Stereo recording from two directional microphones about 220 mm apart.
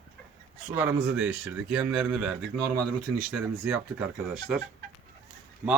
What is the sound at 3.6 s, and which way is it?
Speech, 5° right (ahead or behind).